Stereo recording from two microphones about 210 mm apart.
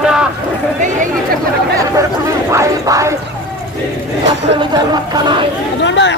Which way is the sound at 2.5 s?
15° right (ahead or behind).